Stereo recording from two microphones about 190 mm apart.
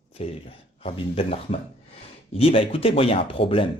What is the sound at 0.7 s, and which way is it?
Speech, 30° left (ahead or behind).